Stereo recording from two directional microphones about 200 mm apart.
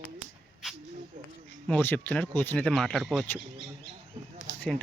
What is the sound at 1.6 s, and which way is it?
Speech, 10° left (ahead or behind).